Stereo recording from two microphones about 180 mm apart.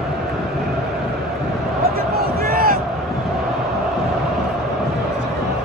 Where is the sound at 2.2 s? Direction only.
55° right (ahead or behind).